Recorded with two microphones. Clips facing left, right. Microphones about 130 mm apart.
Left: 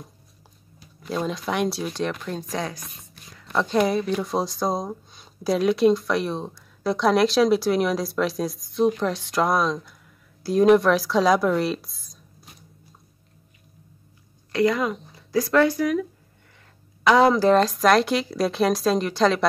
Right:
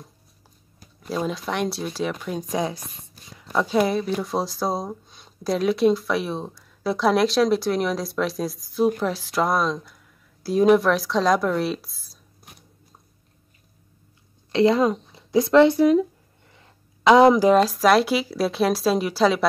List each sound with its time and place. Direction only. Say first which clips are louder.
1.0 s speech: even; centre (ahead or behind)
2.5 s speech: right 5 dB; 20° right (ahead or behind)
3.4 s speech: even; 5° right (ahead or behind)
14.5 s speech: right 4 dB; 25° right (ahead or behind); by 19.4 s 5° right (ahead or behind)